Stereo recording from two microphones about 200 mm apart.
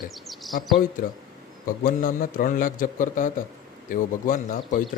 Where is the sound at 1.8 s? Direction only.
45° left (ahead or behind).